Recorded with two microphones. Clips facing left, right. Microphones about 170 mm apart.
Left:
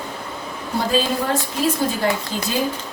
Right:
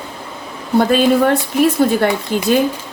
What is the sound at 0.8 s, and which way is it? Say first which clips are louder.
Speech: right 8 dB; 60° right (ahead or behind).